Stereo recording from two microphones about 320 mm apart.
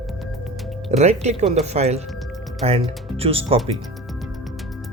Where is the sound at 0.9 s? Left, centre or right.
Right.